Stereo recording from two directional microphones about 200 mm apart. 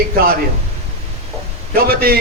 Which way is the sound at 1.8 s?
50° right (ahead or behind).